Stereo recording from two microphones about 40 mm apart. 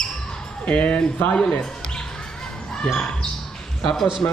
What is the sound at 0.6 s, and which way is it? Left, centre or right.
Speech, left.